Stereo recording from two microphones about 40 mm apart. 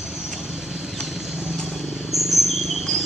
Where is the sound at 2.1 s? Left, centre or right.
Centre.